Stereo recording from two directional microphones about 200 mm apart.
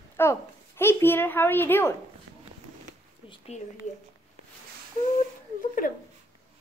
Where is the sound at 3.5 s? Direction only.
35° left (ahead or behind).